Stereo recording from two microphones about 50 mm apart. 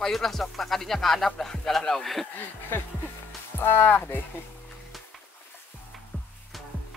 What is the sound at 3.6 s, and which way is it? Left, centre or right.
Speech, left.